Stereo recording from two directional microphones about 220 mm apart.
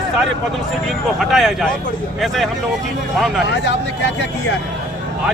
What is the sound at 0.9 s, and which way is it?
Speech, centre (ahead or behind).